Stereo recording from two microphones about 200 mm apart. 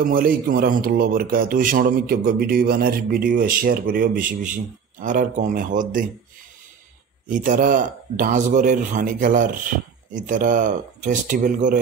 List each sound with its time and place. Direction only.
0.0 s a man's voice: 45° right (ahead or behind)
7.2 s a man's voice: 40° right (ahead or behind)